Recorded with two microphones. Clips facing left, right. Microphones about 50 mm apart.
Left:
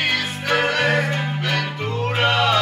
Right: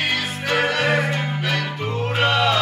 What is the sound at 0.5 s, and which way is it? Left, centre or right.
Music, centre.